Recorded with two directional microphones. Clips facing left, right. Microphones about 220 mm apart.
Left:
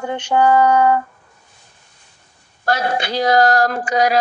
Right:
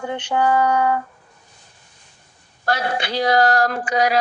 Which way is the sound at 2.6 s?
45° left (ahead or behind).